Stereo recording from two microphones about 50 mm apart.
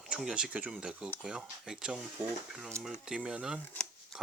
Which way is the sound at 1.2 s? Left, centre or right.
Centre.